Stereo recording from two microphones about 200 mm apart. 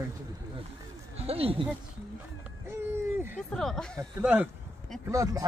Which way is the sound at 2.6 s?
10° right (ahead or behind).